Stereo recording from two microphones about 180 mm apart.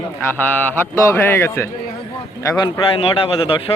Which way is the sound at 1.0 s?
15° left (ahead or behind).